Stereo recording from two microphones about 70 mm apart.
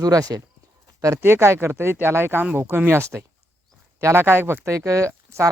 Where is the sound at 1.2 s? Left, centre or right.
Right.